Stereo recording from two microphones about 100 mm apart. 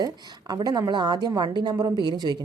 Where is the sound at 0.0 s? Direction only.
45° right (ahead or behind).